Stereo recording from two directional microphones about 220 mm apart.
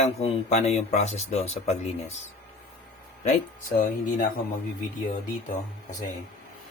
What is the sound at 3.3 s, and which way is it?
Speech, 35° left (ahead or behind).